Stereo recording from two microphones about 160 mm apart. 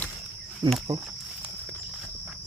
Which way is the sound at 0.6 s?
30° right (ahead or behind).